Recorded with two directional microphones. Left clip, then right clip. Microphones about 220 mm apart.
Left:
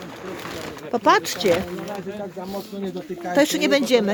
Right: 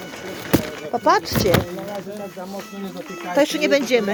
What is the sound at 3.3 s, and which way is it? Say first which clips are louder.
Speech: right 1 dB; 15° left (ahead or behind).